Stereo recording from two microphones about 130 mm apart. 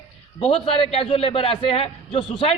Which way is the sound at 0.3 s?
45° left (ahead or behind).